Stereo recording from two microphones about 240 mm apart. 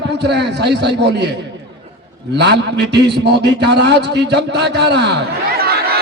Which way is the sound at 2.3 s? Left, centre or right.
Right.